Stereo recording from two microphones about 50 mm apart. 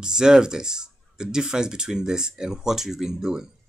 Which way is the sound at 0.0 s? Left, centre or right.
Centre.